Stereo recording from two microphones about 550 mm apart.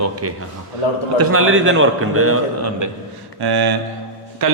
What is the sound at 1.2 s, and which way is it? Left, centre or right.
A man's voice, right.